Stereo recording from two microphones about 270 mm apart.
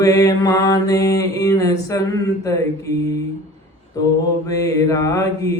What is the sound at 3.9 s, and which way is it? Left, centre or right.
Mantra, centre.